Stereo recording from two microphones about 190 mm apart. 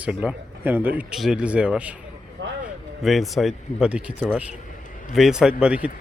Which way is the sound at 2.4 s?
80° right.